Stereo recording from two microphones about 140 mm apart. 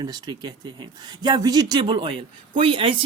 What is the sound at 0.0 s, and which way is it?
Speech, 30° right (ahead or behind).